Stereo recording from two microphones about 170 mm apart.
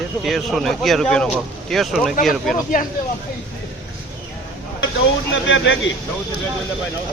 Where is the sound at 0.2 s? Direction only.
Centre (ahead or behind).